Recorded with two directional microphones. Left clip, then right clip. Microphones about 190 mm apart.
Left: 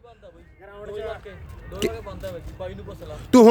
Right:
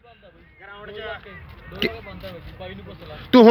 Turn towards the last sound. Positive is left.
turn(degrees=15)  # may be behind; listen again after turning